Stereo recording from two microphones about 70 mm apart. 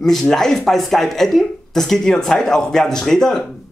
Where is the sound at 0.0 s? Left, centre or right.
Centre.